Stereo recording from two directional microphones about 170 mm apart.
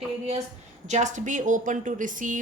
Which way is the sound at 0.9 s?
45° right (ahead or behind).